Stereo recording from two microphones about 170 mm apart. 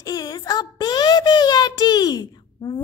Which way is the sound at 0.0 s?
25° left (ahead or behind).